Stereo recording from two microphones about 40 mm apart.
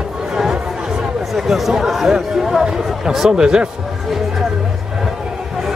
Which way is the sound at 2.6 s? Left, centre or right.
Centre.